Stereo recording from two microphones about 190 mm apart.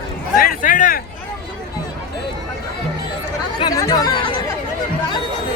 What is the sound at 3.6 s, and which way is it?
Speech, 20° left (ahead or behind).